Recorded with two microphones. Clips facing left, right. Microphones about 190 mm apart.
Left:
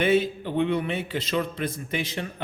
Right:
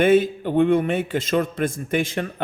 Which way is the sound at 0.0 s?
50° right (ahead or behind).